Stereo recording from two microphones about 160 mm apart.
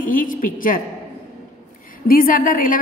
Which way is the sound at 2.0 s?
60° left (ahead or behind).